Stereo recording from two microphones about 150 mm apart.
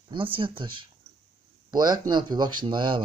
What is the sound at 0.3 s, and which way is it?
Speech, 35° right (ahead or behind).